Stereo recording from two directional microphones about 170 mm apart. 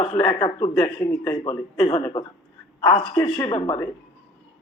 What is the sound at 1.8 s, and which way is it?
Speech, 25° left (ahead or behind).